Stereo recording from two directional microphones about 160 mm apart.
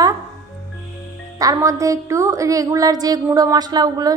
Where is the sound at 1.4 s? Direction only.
20° right (ahead or behind).